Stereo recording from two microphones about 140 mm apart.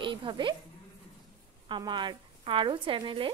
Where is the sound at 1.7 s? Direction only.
35° right (ahead or behind).